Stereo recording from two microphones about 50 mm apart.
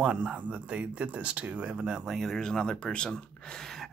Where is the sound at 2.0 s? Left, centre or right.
Centre.